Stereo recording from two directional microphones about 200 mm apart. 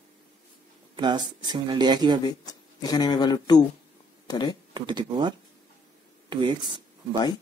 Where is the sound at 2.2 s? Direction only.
20° left (ahead or behind).